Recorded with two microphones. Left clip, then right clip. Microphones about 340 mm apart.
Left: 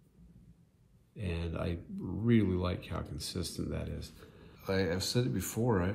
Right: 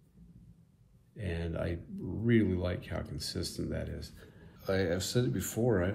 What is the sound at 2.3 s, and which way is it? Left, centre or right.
Speech, centre.